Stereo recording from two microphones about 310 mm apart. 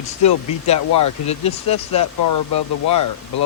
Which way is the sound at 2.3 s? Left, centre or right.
Left.